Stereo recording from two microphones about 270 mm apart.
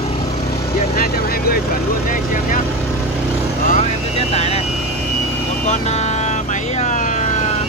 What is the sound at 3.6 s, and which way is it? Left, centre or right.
Vehicle, left.